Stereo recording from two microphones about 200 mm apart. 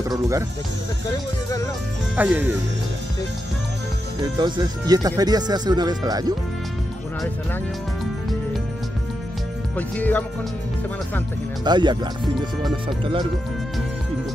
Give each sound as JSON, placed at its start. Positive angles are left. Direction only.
{"t": 0.1, "sound": "speech", "side_deg": -15}
{"t": 2.1, "sound": "speech", "side_deg": -10}
{"t": 4.4, "sound": "speech", "side_deg": -20}
{"t": 9.8, "sound": "music", "side_deg": 10}
{"t": 11.6, "sound": "speech", "side_deg": -20}